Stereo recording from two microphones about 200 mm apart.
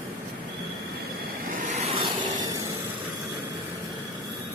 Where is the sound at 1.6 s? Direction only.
35° right (ahead or behind).